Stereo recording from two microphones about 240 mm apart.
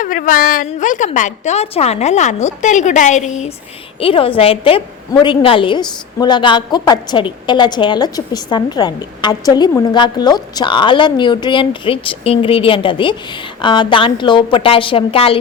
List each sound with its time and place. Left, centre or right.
0.0 s a woman's voice: left